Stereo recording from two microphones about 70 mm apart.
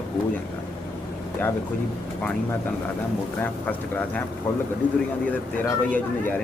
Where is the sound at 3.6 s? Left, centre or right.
Left.